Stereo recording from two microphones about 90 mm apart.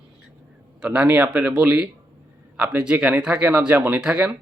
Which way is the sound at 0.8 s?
15° right (ahead or behind).